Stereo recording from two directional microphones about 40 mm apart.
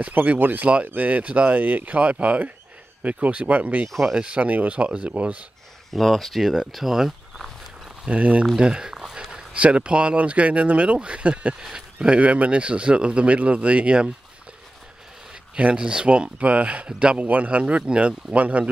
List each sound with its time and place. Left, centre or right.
0.1 s speech: right
1.6 s speech: right
4.1 s speech: right
4.4 s speech: right
5.9 s speech: centre
8.0 s speech: right
8.5 s speech: centre
8.9 s a sound: centre
9.5 s speech: right
11.6 s speech: centre
12.2 s speech: right
15.5 s speech: right